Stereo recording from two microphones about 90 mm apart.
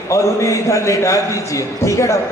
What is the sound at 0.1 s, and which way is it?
A man's voice, 35° left (ahead or behind).